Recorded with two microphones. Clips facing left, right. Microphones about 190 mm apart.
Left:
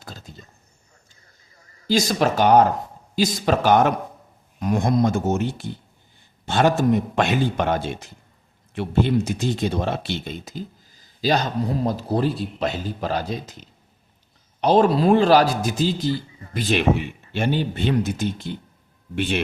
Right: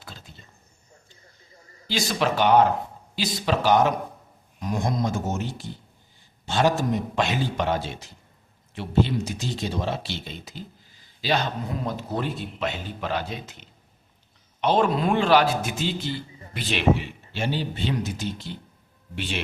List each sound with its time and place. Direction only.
0.0 s a sound: 40° left (ahead or behind)
1.9 s a man's voice: 40° left (ahead or behind)
17.3 s a man's voice: 55° left (ahead or behind)